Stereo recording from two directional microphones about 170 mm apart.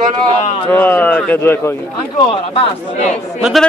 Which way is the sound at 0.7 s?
10° left (ahead or behind).